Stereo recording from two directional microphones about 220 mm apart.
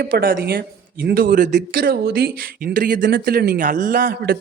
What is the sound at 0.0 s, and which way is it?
A woman's voice, 45° right (ahead or behind).